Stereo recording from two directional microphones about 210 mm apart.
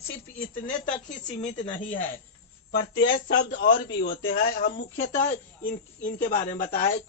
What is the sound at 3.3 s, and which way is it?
A man's voice, 60° left (ahead or behind).